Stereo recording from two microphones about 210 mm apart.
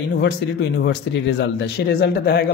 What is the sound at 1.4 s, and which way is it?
Speech, 55° left (ahead or behind).